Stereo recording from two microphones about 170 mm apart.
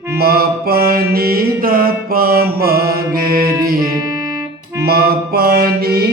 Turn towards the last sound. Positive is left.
turn(degrees=-65)  # may be behind; listen again after turning